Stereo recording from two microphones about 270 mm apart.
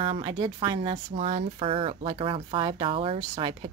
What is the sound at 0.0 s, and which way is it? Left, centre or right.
A woman's voice, centre.